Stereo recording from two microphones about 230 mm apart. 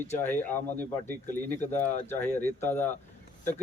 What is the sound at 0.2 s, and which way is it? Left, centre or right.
A man's voice, centre.